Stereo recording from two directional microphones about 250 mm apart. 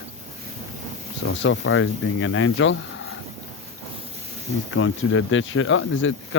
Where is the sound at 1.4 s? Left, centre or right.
Left.